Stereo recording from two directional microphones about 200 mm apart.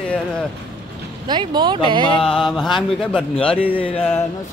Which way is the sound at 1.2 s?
20° right (ahead or behind).